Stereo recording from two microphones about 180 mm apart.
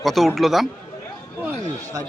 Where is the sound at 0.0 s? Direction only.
Centre (ahead or behind).